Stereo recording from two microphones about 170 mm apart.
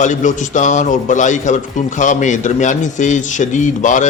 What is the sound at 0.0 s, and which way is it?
A man's voice, 45° left (ahead or behind).